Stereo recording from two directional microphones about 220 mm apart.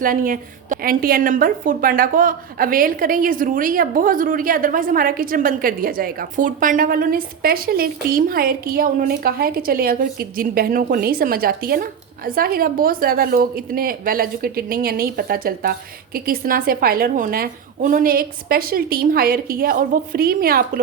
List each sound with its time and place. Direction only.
0.0 s a woman's voice: 40° right (ahead or behind)